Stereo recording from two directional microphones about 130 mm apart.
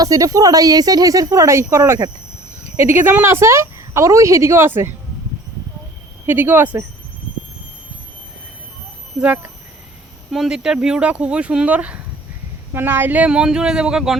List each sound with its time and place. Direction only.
0.0 s a woman's voice: 30° right (ahead or behind)
6.2 s speech: 15° right (ahead or behind)
9.2 s speech: 15° right (ahead or behind)
10.3 s speech: 5° right (ahead or behind)